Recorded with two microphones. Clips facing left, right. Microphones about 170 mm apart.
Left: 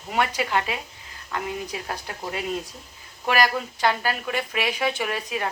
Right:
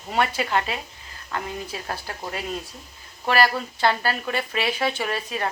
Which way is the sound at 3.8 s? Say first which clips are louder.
Right 2 dB; 15° left (ahead or behind).